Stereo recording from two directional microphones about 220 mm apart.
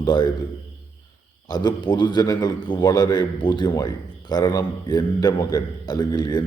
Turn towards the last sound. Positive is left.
turn(degrees=20)  # may be behind; listen again after turning